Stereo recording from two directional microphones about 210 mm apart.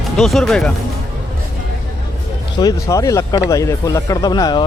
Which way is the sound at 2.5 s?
15° left (ahead or behind).